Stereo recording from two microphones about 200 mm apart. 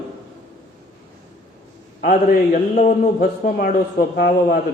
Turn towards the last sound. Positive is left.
turn(degrees=50)  # may be behind; listen again after turning